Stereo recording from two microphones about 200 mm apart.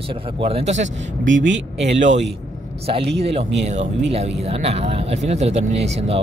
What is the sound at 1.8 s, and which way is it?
Speech, 35° right (ahead or behind).